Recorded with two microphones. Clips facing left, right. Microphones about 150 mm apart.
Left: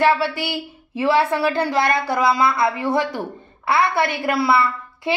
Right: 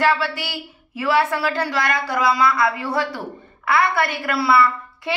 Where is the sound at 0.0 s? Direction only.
20° left (ahead or behind).